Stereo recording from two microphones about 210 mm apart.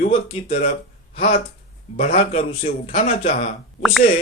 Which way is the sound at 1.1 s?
25° left (ahead or behind).